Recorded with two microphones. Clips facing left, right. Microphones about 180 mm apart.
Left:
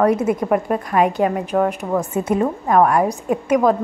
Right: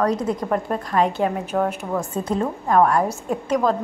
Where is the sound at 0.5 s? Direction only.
10° left (ahead or behind).